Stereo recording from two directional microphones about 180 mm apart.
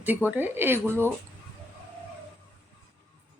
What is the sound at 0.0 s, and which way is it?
A woman's voice, 10° right (ahead or behind).